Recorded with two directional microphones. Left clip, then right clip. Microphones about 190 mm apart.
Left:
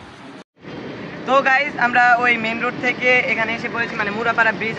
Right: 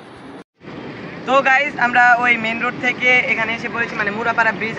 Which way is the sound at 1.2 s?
Centre (ahead or behind).